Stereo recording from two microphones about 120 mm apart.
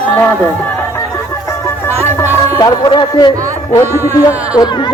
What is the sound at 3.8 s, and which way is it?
Speech, 20° right (ahead or behind).